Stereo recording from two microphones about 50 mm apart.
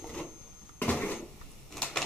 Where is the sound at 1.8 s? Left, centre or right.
Centre.